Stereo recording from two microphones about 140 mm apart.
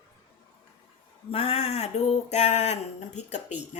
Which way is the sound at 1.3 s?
45° left (ahead or behind).